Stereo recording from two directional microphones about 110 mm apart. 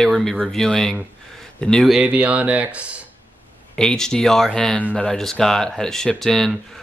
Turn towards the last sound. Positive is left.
turn(degrees=5)  # may be behind; listen again after turning